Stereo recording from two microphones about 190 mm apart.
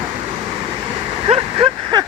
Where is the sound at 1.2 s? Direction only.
30° right (ahead or behind).